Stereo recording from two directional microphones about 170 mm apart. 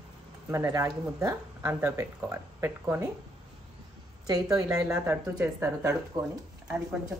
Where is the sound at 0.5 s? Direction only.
15° right (ahead or behind).